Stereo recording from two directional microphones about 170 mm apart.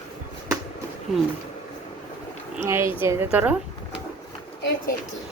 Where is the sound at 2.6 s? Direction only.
15° right (ahead or behind).